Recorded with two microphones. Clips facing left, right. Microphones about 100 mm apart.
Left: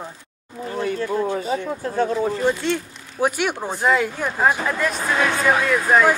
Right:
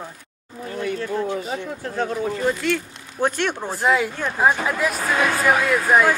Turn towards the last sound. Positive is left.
turn(degrees=-5)  # may be behind; listen again after turning